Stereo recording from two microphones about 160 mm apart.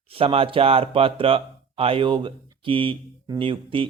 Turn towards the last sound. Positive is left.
turn(degrees=-35)  # may be behind; listen again after turning